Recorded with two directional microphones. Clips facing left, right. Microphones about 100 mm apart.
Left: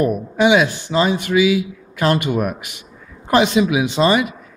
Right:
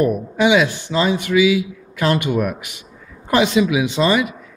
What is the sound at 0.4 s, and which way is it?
Speech, 35° left (ahead or behind).